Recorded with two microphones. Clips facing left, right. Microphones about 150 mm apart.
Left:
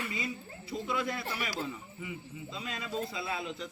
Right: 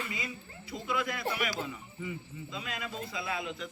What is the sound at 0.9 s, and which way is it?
Speech, 30° left (ahead or behind).